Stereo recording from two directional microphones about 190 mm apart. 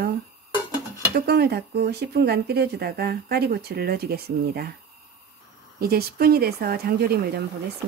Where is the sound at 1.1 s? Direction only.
55° right (ahead or behind).